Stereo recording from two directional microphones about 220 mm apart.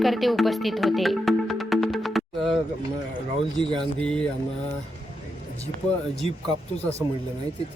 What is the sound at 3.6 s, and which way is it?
Speech, centre (ahead or behind).